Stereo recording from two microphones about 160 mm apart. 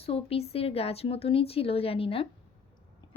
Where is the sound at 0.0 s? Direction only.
35° left (ahead or behind).